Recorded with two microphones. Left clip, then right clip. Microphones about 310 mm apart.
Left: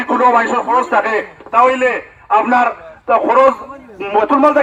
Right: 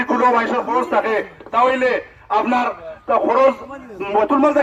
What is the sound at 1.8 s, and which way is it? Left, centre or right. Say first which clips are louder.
A man's voice: left 3 dB; centre.